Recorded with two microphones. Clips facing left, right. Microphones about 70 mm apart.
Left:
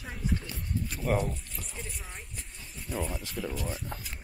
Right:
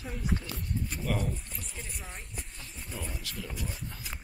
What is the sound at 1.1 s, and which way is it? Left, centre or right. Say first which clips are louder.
Speech: left 5 dB; left.